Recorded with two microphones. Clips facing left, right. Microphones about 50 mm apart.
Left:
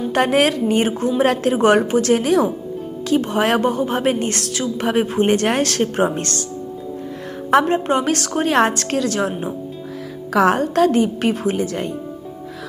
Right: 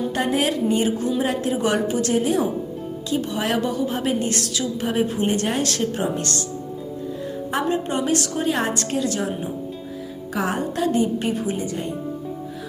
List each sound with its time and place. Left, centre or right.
0.1 s a woman's voice: left
3.1 s a woman's voice: left
7.5 s a woman's voice: left
10.4 s a woman's voice: left